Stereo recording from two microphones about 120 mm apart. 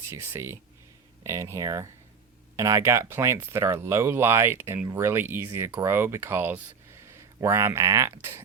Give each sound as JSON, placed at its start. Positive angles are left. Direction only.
{"t": 0.1, "sound": "speech", "side_deg": -20}